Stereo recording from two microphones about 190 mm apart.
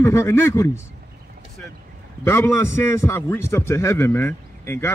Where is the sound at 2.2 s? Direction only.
10° left (ahead or behind).